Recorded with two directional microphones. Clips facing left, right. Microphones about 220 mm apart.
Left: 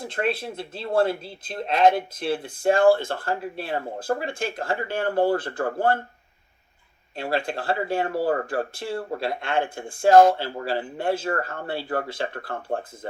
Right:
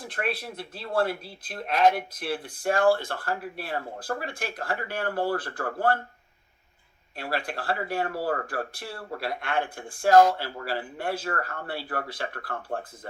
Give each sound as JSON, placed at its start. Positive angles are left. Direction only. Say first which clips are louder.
{"t": 0.0, "sound": "speech", "louder": "left 5 dB", "side_deg": 25}
{"t": 7.2, "sound": "speech", "louder": "left 5 dB", "side_deg": 25}